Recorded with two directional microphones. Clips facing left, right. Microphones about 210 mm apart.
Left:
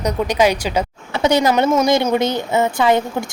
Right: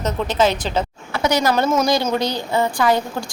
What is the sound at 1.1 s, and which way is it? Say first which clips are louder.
A woman's voice: left 3 dB; 25° left (ahead or behind).